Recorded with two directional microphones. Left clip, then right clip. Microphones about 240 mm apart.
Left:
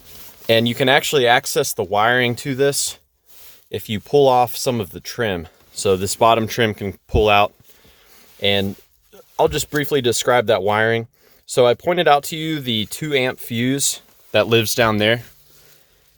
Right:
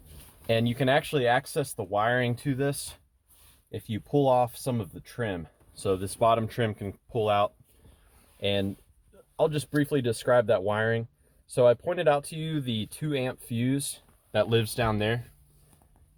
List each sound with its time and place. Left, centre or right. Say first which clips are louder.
0.4 s speech: left 10 dB; left